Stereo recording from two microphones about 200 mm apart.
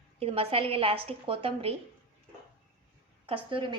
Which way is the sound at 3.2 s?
25° right (ahead or behind).